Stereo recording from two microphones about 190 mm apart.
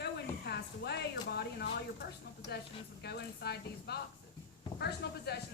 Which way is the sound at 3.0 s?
60° left (ahead or behind).